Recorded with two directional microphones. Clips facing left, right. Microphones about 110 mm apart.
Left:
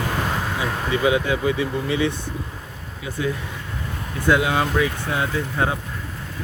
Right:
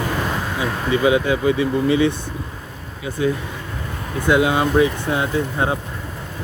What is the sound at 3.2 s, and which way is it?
Speech, 25° right (ahead or behind).